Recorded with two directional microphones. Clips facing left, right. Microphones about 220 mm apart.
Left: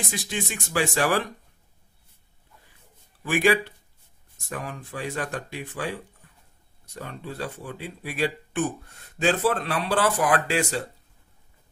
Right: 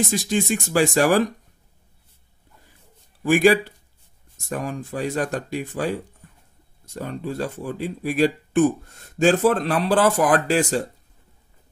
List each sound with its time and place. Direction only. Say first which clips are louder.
0.3 s speech: right 6 dB; 40° right (ahead or behind)
3.3 s speech: right 6 dB; 40° right (ahead or behind)